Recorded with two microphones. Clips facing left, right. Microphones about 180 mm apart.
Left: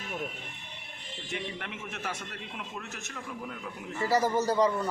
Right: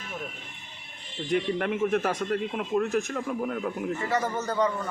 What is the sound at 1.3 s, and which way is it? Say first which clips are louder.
A man's voice: right 12 dB; 50° right (ahead or behind).